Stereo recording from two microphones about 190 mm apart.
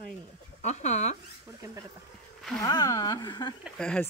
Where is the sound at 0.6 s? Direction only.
40° left (ahead or behind).